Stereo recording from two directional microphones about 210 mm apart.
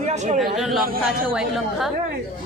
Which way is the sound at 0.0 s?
35° right (ahead or behind).